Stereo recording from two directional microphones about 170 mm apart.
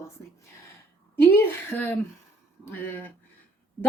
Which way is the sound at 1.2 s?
15° left (ahead or behind).